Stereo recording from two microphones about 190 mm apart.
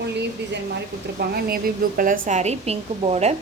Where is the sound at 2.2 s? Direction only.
35° right (ahead or behind).